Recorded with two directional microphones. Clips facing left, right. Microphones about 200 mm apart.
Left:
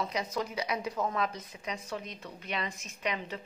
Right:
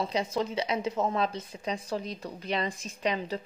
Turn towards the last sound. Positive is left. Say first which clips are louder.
# right 5 dB
turn(degrees=-35)  # may be behind; listen again after turning